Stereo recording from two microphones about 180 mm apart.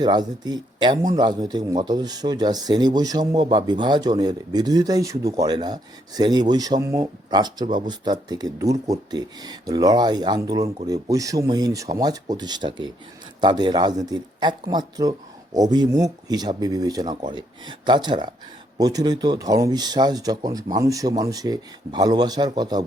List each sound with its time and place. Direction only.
0.0 s speech: 25° right (ahead or behind)